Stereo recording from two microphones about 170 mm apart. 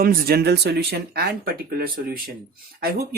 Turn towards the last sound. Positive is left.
turn(degrees=-65)  # may be behind; listen again after turning